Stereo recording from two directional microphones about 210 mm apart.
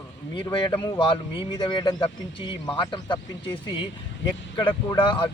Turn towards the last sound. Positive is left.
turn(degrees=25)  # may be behind; listen again after turning